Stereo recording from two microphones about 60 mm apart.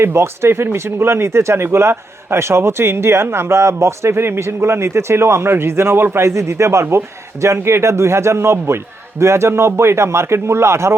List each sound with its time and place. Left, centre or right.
0.0 s speech: right